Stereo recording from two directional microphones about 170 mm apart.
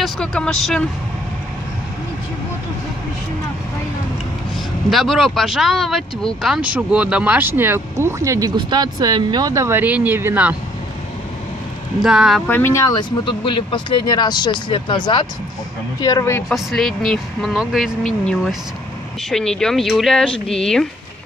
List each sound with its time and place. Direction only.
0.0 s speech: 5° left (ahead or behind)
4.8 s speech: centre (ahead or behind)
12.0 s speech: 5° right (ahead or behind)
12.4 s speech: 15° left (ahead or behind)
16.4 s speech: centre (ahead or behind)